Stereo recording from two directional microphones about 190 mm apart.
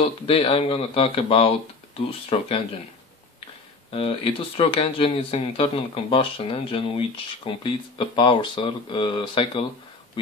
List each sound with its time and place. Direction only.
0.3 s speech: 30° left (ahead or behind)
3.9 s speech: 30° left (ahead or behind)